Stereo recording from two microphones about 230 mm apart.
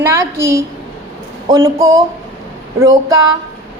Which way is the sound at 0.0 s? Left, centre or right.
Centre.